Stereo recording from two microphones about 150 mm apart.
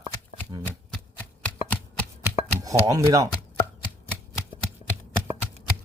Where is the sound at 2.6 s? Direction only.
20° right (ahead or behind).